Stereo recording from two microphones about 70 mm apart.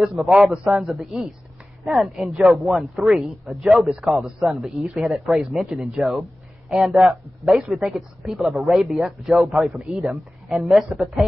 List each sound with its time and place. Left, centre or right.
0.1 s a man's voice: centre
10.9 s a man's voice: centre